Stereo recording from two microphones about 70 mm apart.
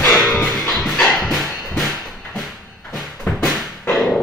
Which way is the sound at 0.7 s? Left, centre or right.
Centre.